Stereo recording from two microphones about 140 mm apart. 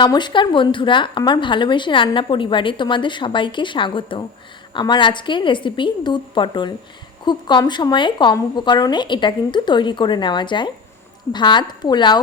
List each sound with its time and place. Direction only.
0.0 s a woman's voice: 35° left (ahead or behind)